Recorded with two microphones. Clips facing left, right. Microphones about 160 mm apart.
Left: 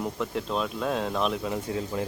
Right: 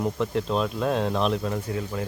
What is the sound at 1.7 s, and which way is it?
Speech, 20° left (ahead or behind).